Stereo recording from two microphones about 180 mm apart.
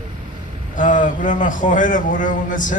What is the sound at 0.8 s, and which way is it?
Speech, 45° left (ahead or behind).